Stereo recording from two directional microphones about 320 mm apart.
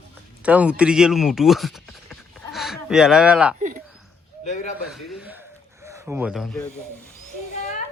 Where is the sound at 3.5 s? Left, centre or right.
Right.